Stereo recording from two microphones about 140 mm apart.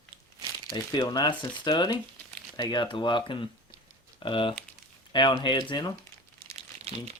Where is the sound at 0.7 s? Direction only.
30° left (ahead or behind).